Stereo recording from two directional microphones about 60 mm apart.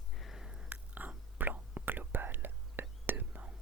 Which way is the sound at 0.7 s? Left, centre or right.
Right.